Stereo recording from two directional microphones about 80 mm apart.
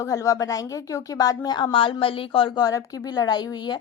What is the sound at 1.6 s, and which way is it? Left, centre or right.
A woman's voice, left.